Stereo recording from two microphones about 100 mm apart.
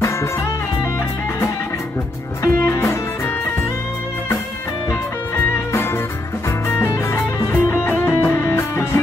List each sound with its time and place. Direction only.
2.4 s music: 30° left (ahead or behind)
5.7 s music: 25° left (ahead or behind)